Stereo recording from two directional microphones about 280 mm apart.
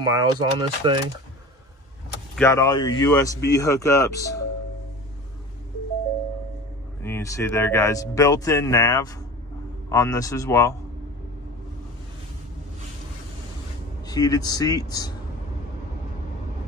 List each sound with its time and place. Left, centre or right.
0.0 s speech: centre
2.3 s a man's voice: centre
7.0 s a man's voice: centre
14.0 s a man's voice: centre